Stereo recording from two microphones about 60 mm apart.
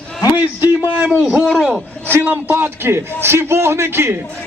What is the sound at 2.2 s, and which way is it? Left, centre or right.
A man's voice, right.